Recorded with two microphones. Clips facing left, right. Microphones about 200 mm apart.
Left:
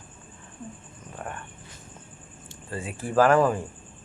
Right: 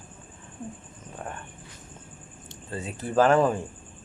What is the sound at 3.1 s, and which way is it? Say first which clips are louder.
Speech: left 1 dB; 20° right (ahead or behind).